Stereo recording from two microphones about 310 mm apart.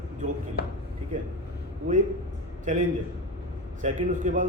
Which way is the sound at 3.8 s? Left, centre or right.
Right.